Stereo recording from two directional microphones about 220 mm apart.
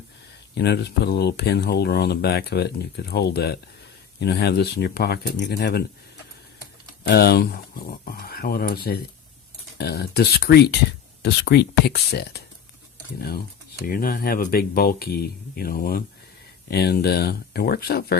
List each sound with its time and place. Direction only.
0.5 s speech: 50° left (ahead or behind)
7.1 s speech: 45° left (ahead or behind)